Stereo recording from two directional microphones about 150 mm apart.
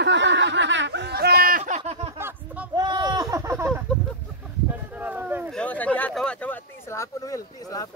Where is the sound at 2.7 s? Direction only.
30° right (ahead or behind).